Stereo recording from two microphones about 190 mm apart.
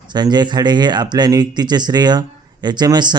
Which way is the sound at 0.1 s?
20° right (ahead or behind).